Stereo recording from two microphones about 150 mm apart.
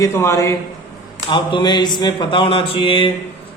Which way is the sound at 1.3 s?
30° left (ahead or behind).